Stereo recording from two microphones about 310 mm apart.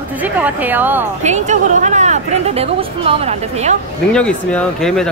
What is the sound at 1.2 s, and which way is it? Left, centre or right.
Speech, right.